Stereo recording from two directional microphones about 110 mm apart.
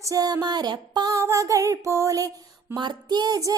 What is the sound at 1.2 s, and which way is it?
Music, 30° right (ahead or behind).